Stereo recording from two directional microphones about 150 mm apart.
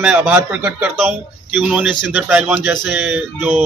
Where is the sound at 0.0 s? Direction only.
10° right (ahead or behind).